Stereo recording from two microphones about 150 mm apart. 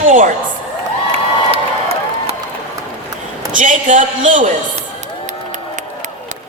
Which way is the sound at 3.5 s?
60° right (ahead or behind).